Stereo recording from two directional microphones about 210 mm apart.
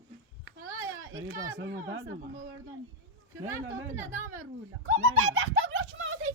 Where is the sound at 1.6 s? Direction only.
60° right (ahead or behind).